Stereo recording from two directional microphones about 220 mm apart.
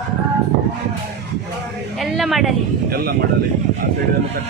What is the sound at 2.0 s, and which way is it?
Speech, centre (ahead or behind).